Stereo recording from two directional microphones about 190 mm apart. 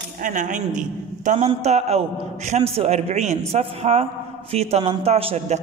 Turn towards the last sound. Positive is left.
turn(degrees=-35)  # may be behind; listen again after turning